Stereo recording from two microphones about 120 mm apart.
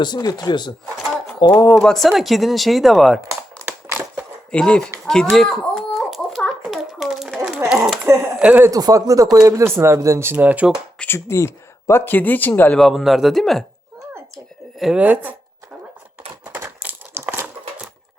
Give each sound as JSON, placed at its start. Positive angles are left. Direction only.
{"t": 0.0, "sound": "speech", "side_deg": 35}
{"t": 1.8, "sound": "speech", "side_deg": 0}
{"t": 3.7, "sound": "crushing", "side_deg": -15}
{"t": 4.5, "sound": "speech", "side_deg": 10}
{"t": 5.0, "sound": "a sound", "side_deg": 5}
{"t": 8.4, "sound": "speech", "side_deg": -15}
{"t": 8.7, "sound": "speech", "side_deg": -30}
{"t": 10.9, "sound": "speech", "side_deg": 10}
{"t": 11.3, "sound": "speech", "side_deg": 20}
{"t": 12.8, "sound": "speech", "side_deg": 0}
{"t": 14.8, "sound": "speech", "side_deg": -10}
{"t": 16.6, "sound": "crumpling", "side_deg": -20}